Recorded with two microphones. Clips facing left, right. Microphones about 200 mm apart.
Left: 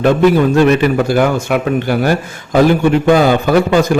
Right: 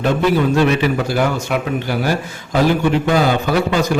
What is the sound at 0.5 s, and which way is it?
A man's voice, 50° left (ahead or behind).